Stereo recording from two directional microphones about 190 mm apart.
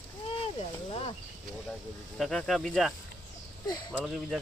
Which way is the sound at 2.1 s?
Centre (ahead or behind).